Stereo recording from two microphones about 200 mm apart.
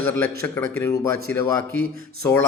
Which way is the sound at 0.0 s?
10° left (ahead or behind).